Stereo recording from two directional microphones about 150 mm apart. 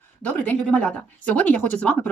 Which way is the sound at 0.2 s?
10° left (ahead or behind).